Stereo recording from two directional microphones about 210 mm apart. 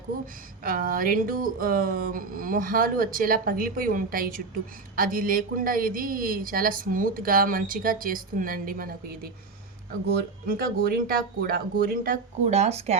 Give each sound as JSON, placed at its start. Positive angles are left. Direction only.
{"t": 0.6, "sound": "speech", "side_deg": -40}
{"t": 10.1, "sound": "speech", "side_deg": -45}